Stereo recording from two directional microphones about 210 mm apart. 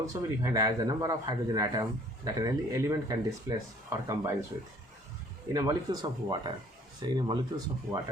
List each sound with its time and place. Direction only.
0.0 s a man's voice: 15° right (ahead or behind)
5.5 s speech: 20° right (ahead or behind)